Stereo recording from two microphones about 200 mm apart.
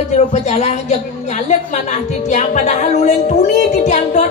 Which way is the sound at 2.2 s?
35° left (ahead or behind).